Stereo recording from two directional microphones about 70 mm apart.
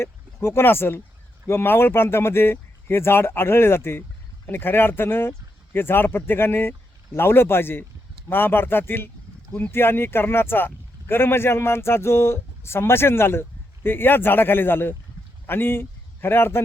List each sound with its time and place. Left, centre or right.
0.0 s speech: left